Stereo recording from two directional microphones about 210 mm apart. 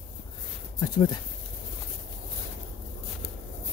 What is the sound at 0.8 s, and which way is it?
Speech, 20° left (ahead or behind).